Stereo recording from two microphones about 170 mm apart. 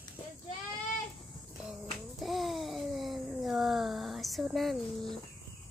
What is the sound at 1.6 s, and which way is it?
Babbling, centre (ahead or behind).